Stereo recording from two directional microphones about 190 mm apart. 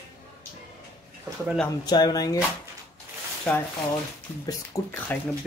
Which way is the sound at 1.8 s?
20° left (ahead or behind).